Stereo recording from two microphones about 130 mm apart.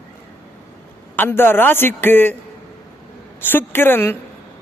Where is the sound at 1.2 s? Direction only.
15° left (ahead or behind).